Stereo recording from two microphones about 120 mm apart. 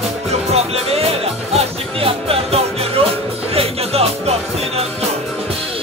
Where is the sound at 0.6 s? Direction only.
55° right (ahead or behind).